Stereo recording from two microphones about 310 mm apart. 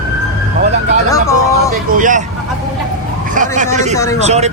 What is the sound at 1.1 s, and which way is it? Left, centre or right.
Speech, centre.